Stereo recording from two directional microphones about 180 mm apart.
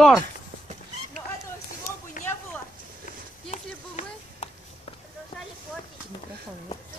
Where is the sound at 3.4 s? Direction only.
40° left (ahead or behind).